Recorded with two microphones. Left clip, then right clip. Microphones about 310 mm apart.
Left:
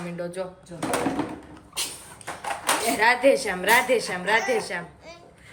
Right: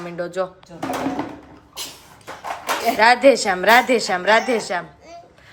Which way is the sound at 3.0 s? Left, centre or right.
Centre.